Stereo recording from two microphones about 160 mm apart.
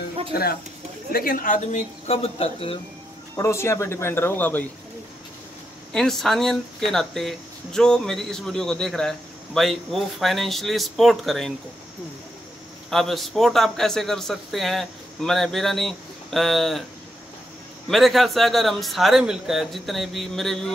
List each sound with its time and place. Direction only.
0.3 s speech: 75° left (ahead or behind)
1.1 s speech: 65° left (ahead or behind); by 2.8 s 35° left (ahead or behind)
3.3 s speech: 20° left (ahead or behind)
5.9 s speech: centre (ahead or behind)
12.9 s speech: centre (ahead or behind)
17.8 s speech: centre (ahead or behind)